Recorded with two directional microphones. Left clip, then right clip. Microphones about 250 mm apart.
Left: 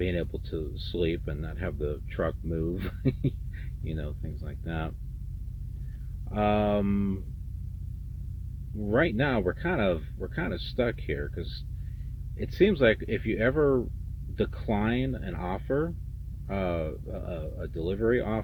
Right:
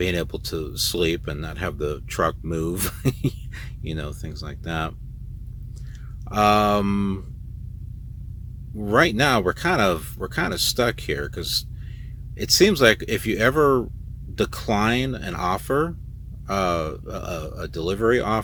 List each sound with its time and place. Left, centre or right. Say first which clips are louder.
0.0 s speech: right 7 dB; centre
6.2 s speech: right 9 dB; centre
8.8 s speech: right 8 dB; centre